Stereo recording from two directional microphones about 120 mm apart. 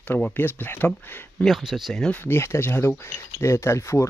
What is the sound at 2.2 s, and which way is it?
Speech, 20° left (ahead or behind).